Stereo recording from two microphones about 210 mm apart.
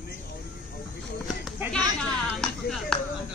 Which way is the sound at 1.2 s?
Centre (ahead or behind).